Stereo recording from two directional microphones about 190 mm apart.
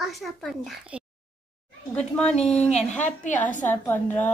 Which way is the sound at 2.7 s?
40° left (ahead or behind).